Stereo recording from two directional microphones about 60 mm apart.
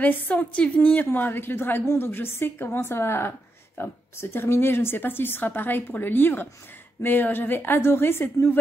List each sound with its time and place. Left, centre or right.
0.0 s a woman's voice: left